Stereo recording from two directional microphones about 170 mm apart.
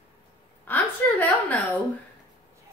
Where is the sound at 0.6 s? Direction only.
10° left (ahead or behind).